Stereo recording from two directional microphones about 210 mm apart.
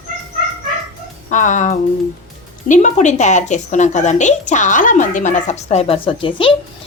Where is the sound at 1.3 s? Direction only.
35° left (ahead or behind).